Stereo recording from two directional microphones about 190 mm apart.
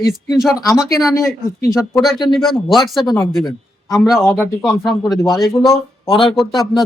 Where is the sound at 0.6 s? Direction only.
20° left (ahead or behind).